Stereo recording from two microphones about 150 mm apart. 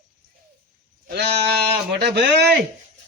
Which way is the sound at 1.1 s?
90° right.